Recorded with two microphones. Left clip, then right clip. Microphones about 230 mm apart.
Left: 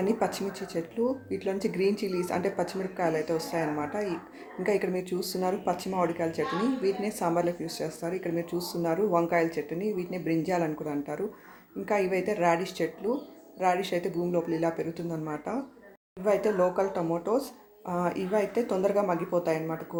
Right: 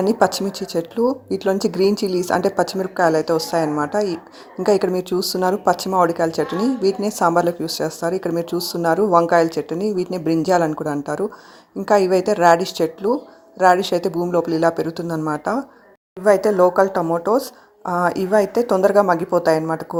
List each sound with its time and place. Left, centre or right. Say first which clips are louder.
0.0 s speech: right 11 dB; right